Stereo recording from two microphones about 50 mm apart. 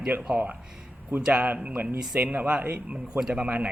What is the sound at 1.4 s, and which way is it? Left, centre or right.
Speech, right.